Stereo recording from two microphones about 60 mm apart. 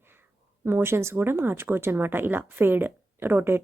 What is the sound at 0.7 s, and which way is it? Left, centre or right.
A woman's voice, right.